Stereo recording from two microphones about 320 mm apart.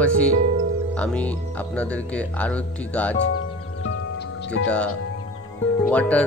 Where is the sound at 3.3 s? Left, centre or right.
Left.